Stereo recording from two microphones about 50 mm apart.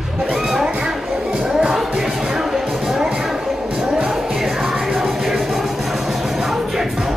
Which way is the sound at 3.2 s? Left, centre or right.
Centre.